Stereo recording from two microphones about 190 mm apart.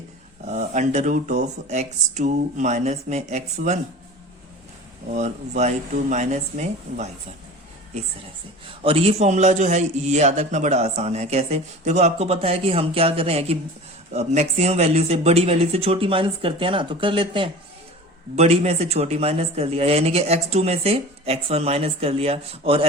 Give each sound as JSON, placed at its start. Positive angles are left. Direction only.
{"t": 0.4, "sound": "a man's voice", "side_deg": -40}
{"t": 5.1, "sound": "a man's voice", "side_deg": -35}
{"t": 8.8, "sound": "a man's voice", "side_deg": -30}